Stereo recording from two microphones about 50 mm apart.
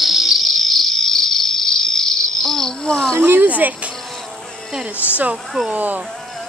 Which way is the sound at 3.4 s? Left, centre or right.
Right.